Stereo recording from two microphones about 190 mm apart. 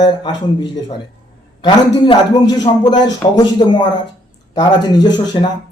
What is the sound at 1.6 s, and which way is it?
Speech, 20° left (ahead or behind).